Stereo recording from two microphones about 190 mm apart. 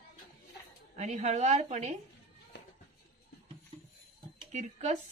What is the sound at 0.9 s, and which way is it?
A woman's voice, 40° right (ahead or behind).